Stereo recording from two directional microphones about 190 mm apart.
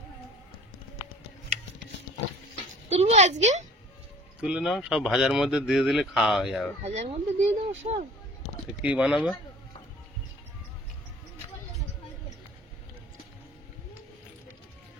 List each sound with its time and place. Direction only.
2.9 s speech: 35° right (ahead or behind)
4.4 s speech: 5° right (ahead or behind)
6.8 s speech: 35° right (ahead or behind)
8.8 s speech: 5° right (ahead or behind)